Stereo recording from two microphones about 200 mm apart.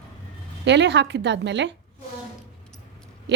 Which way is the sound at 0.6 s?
60° right (ahead or behind).